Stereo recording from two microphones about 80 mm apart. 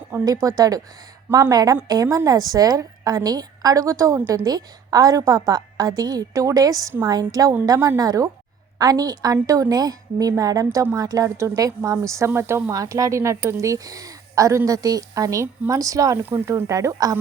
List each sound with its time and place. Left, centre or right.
0.3 s a woman's voice: right
4.4 s a woman's voice: right
12.7 s a woman's voice: right